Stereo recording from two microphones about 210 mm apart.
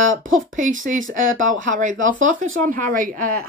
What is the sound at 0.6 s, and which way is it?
Speech, 40° right (ahead or behind).